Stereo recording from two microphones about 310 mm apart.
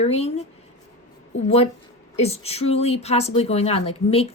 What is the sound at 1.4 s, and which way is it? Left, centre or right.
Speech, centre.